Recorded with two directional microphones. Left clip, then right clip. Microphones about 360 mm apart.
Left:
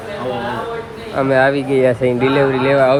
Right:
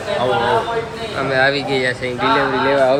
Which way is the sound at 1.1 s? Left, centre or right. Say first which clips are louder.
Left 3 dB; centre.